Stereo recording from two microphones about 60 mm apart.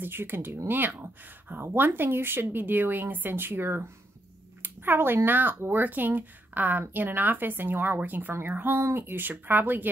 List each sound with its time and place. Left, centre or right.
0.0 s speech: right